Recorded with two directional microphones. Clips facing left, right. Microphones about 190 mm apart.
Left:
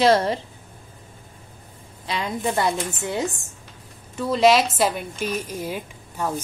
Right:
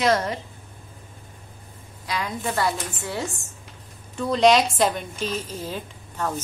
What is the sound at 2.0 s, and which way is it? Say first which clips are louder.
A woman's voice: left 3 dB; 25° left (ahead or behind).